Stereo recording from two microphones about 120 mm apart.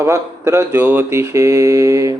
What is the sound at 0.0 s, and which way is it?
Mantra, 20° right (ahead or behind).